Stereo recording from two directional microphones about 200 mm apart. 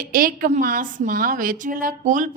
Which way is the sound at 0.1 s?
45° right (ahead or behind).